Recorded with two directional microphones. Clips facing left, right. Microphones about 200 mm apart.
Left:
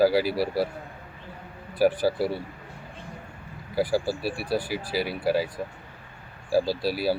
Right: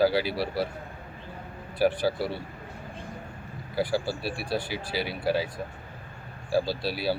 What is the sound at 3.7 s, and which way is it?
Speech, 5° left (ahead or behind).